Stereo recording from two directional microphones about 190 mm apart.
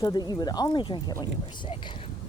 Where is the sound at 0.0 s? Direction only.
20° left (ahead or behind).